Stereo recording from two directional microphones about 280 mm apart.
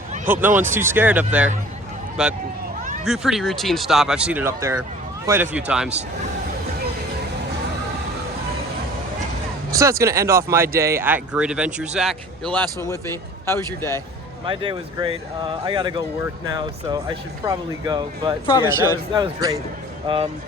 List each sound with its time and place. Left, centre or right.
0.3 s speech: centre
9.7 s speech: centre
13.4 s speech: centre
14.4 s speech: centre